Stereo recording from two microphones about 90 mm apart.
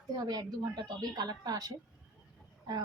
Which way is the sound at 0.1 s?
45° right (ahead or behind).